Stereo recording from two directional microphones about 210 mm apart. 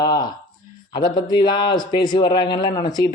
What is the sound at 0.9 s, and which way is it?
Speech, 20° left (ahead or behind).